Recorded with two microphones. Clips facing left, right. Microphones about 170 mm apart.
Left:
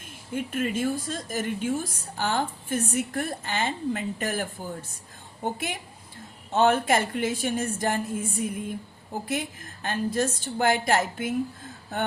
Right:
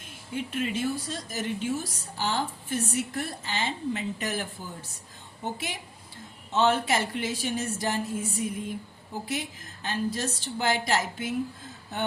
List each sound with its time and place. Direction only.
0.3 s a woman's voice: 50° left (ahead or behind)